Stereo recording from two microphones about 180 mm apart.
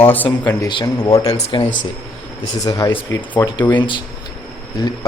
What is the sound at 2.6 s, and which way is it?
Speech, 20° left (ahead or behind).